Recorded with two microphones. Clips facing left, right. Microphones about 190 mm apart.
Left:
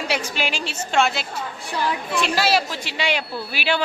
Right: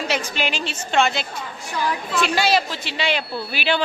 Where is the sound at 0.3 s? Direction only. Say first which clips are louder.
Right 1 dB; 10° left (ahead or behind).